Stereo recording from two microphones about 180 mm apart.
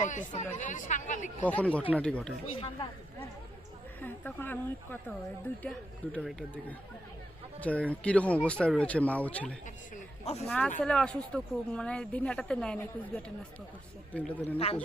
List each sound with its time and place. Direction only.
0.0 s speech: 45° left (ahead or behind)
1.5 s a woman's voice: 5° left (ahead or behind)
2.5 s speech: 30° left (ahead or behind)
4.0 s a woman's voice: 10° left (ahead or behind)
9.6 s speech: 40° left (ahead or behind)
10.4 s a woman's voice: 5° left (ahead or behind)